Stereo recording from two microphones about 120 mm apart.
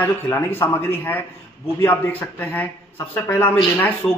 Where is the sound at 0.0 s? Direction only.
20° left (ahead or behind).